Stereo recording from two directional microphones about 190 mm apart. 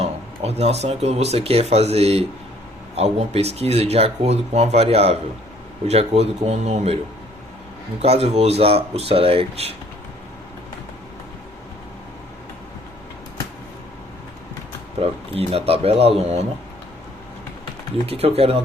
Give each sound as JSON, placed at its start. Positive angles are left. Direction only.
{"t": 0.0, "sound": "speech", "side_deg": -35}
{"t": 8.0, "sound": "speech", "side_deg": -35}
{"t": 14.9, "sound": "speech", "side_deg": -30}
{"t": 18.0, "sound": "speech", "side_deg": -30}